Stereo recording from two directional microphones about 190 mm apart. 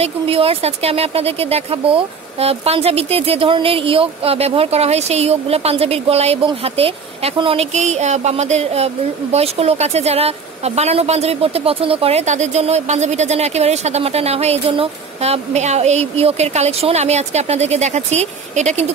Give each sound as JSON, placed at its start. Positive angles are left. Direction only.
{"t": 0.0, "sound": "speech", "side_deg": -30}